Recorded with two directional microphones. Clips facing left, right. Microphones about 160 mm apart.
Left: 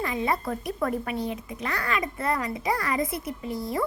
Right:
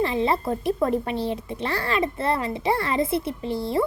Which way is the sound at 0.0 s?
30° right (ahead or behind).